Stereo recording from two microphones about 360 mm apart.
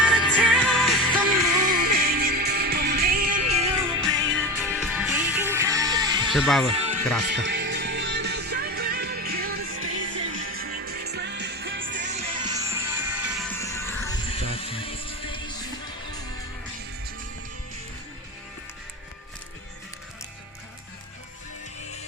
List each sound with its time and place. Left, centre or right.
0.3 s music: centre
1.7 s music: right
4.3 s music: centre
6.3 s speech: centre
6.7 s music: centre
7.3 s music: right
12.0 s music: centre